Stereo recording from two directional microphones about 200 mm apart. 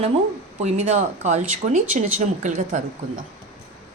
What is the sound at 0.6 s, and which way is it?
Speech, 35° right (ahead or behind).